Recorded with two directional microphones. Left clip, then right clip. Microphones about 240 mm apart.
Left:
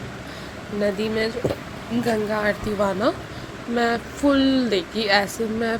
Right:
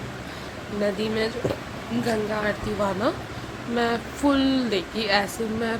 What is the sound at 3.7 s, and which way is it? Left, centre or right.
Speech, centre.